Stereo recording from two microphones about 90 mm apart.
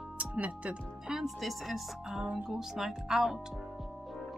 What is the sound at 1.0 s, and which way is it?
Speech, 5° right (ahead or behind).